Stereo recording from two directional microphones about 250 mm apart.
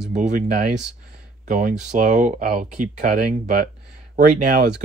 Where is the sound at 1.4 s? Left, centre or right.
Right.